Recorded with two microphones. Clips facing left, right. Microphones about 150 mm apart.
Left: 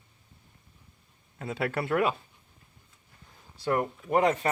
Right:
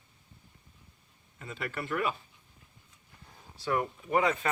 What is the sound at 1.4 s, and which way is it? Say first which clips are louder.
Speech: left 7 dB; 75° left (ahead or behind).